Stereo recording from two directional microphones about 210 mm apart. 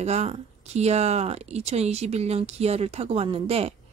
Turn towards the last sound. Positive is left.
turn(degrees=-30)  # may be behind; listen again after turning